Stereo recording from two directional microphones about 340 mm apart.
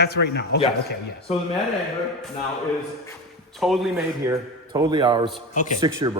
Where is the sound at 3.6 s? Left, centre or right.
Centre.